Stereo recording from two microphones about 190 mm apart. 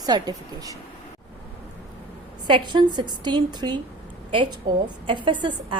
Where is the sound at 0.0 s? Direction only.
20° right (ahead or behind).